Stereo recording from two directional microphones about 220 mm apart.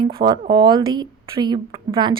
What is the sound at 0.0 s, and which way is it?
A woman's voice, 20° right (ahead or behind).